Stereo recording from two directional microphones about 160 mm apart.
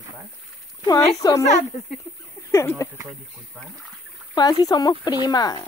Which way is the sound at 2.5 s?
15° left (ahead or behind).